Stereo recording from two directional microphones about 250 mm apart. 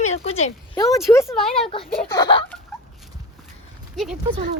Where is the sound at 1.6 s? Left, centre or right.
Left.